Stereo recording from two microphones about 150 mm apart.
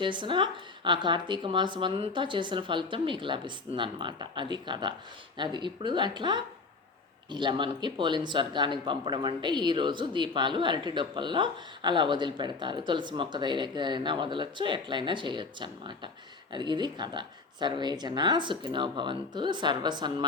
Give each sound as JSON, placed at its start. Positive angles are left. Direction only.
{"t": 0.0, "sound": "speech", "side_deg": -30}